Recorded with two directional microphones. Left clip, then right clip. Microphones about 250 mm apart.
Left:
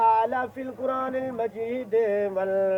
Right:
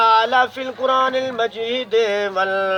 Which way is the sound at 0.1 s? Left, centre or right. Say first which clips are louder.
Right 7 dB; centre.